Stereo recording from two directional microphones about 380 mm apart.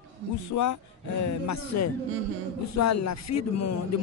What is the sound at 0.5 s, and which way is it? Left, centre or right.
Speech, left.